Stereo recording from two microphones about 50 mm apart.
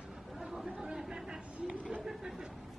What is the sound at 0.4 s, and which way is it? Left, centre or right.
Chatter, centre.